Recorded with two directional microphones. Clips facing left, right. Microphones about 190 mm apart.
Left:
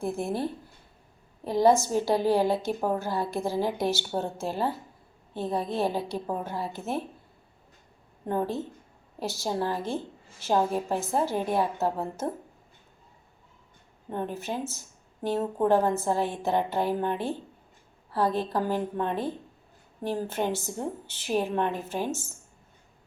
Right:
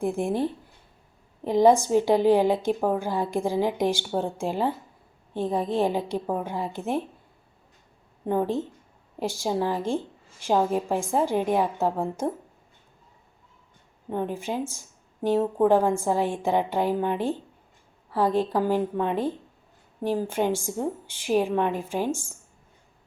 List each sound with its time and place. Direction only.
0.0 s a woman's voice: 15° right (ahead or behind)
8.2 s a woman's voice: 15° right (ahead or behind)
14.1 s a woman's voice: 15° right (ahead or behind)